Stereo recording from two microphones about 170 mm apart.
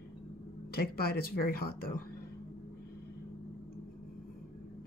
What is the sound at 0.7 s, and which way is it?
Speech, 65° left (ahead or behind).